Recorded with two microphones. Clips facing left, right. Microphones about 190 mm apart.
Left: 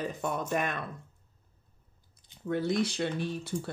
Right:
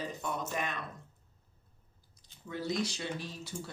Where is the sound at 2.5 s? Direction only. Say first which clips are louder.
Left 6 dB; 60° left (ahead or behind).